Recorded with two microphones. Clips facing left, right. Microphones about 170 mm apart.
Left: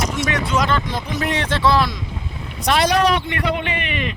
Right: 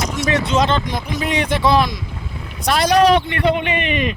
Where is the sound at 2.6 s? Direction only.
40° right (ahead or behind).